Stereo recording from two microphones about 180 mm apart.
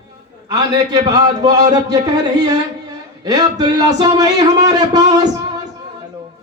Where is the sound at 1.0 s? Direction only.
20° right (ahead or behind).